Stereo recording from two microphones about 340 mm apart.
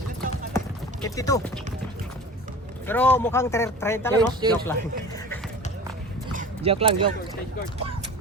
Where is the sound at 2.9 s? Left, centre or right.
Centre.